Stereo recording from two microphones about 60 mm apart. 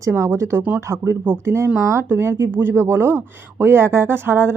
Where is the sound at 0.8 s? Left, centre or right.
Right.